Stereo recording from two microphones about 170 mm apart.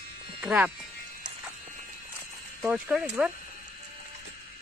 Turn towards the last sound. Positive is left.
turn(degrees=-5)  # may be behind; listen again after turning